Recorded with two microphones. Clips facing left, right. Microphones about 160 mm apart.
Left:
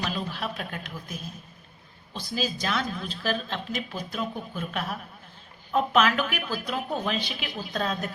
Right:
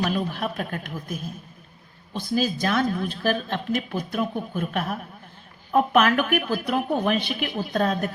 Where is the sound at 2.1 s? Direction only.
50° right (ahead or behind).